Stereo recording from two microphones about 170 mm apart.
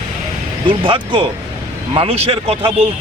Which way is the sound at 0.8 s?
30° right (ahead or behind).